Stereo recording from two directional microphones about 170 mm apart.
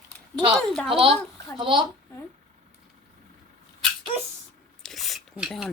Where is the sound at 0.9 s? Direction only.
35° right (ahead or behind).